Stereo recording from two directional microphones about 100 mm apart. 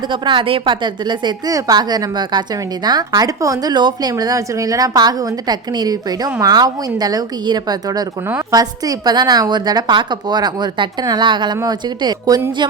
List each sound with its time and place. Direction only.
0.1 s a woman's voice: 55° right (ahead or behind)